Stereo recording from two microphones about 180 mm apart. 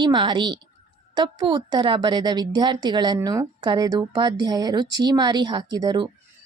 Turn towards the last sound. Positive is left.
turn(degrees=-25)  # may be behind; listen again after turning